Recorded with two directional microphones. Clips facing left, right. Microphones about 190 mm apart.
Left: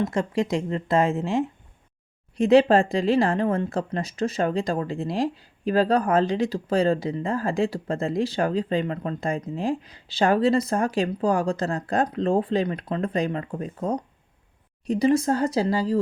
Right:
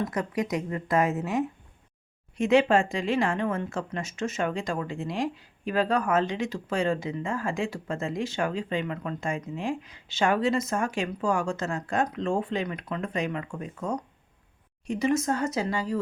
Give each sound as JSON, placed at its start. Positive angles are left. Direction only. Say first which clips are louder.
{"t": 0.0, "sound": "speech", "louder": "left 4 dB", "side_deg": 25}